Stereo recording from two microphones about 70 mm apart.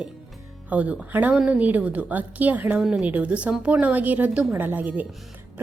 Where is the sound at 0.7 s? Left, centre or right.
Centre.